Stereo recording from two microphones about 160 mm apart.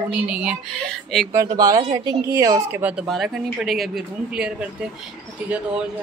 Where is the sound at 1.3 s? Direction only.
20° right (ahead or behind).